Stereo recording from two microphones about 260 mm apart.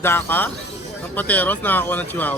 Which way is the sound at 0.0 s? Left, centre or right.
Centre.